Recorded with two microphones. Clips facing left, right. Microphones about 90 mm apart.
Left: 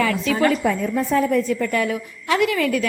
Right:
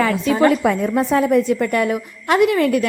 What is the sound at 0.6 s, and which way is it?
A woman's voice, 70° right (ahead or behind).